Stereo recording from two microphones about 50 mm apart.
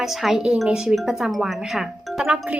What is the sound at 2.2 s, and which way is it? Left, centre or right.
Speech, right.